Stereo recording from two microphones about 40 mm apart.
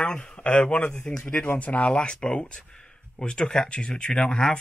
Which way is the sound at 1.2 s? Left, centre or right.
Left.